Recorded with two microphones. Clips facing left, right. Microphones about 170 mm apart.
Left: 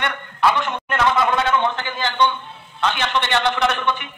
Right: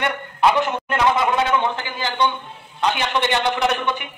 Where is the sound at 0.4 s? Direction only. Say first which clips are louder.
Right 2 dB; 20° right (ahead or behind).